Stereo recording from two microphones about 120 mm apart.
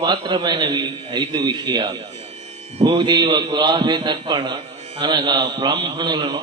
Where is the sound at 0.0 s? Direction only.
40° right (ahead or behind).